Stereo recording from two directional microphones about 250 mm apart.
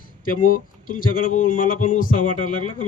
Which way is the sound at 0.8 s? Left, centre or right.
Left.